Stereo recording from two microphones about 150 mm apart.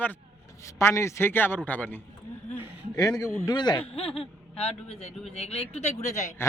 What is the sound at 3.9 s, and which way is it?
A man's voice, 40° left (ahead or behind).